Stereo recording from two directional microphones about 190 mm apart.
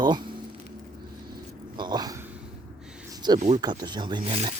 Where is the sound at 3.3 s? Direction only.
35° right (ahead or behind).